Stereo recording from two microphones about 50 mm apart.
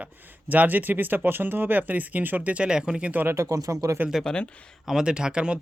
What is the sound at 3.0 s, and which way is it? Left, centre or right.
Speech, right.